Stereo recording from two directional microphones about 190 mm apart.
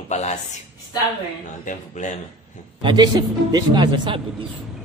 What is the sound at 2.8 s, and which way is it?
Speech, 25° right (ahead or behind).